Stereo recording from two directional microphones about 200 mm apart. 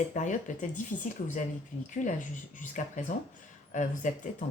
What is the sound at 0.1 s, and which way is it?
Speech, 40° left (ahead or behind).